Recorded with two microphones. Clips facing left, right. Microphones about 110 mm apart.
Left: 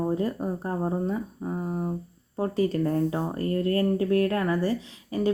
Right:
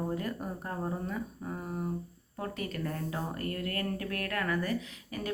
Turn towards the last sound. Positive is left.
turn(degrees=30)  # may be behind; listen again after turning